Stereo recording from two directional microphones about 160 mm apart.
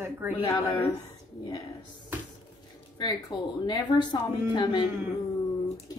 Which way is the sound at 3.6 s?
30° left (ahead or behind).